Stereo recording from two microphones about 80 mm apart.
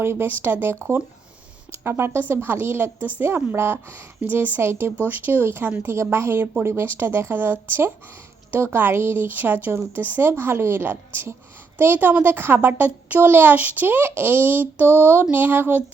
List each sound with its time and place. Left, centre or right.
0.0 s a woman's voice: right